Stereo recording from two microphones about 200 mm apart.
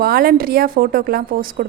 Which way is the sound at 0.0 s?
45° right (ahead or behind).